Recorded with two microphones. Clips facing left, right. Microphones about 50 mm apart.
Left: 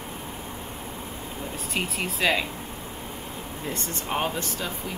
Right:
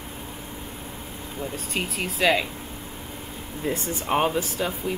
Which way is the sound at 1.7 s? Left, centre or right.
Centre.